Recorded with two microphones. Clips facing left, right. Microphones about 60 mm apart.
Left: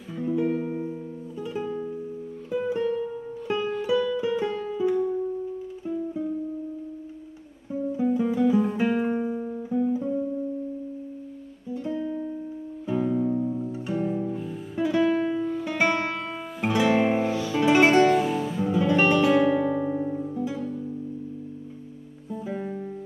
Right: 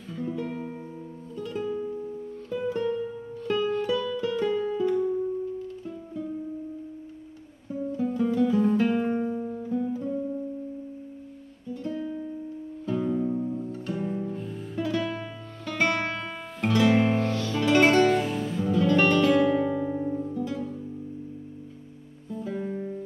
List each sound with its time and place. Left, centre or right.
0.1 s music: centre
7.7 s music: centre
11.7 s music: centre
18.6 s guitar: centre
22.3 s music: centre